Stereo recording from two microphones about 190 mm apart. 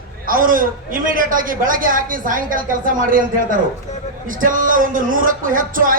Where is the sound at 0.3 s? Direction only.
45° right (ahead or behind).